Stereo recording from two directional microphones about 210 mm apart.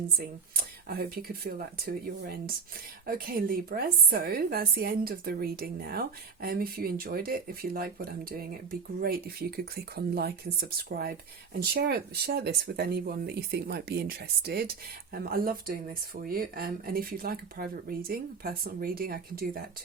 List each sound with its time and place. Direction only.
0.2 s a woman's voice: 45° right (ahead or behind)